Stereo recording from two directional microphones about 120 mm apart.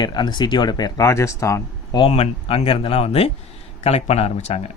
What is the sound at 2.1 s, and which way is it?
Speech, 55° left (ahead or behind).